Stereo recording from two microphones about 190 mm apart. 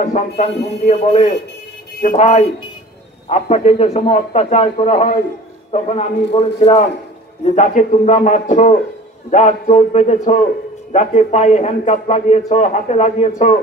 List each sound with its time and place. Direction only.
0.0 s a man's voice: 35° left (ahead or behind)